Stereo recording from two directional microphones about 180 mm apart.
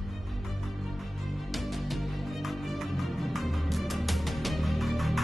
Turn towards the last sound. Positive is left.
turn(degrees=0)  # may be behind; listen again after turning